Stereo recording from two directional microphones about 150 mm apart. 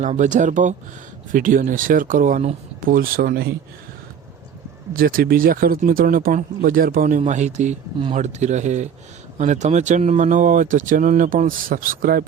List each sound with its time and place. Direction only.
0.0 s speech: 55° right (ahead or behind)
2.8 s speech: 70° right (ahead or behind)
4.9 s speech: 75° right (ahead or behind)
7.2 s speech: 50° right (ahead or behind); by 12.2 s 70° right (ahead or behind)